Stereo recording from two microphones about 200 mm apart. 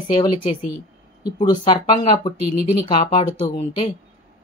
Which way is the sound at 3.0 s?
35° left (ahead or behind).